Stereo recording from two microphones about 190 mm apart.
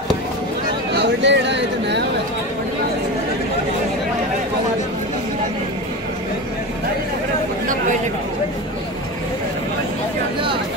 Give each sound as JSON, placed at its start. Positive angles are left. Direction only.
{"t": 0.9, "sound": "speech", "side_deg": -65}